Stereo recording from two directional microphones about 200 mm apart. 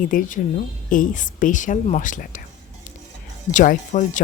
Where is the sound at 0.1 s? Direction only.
40° left (ahead or behind).